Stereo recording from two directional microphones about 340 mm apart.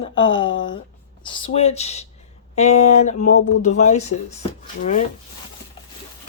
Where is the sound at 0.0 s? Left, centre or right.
Centre.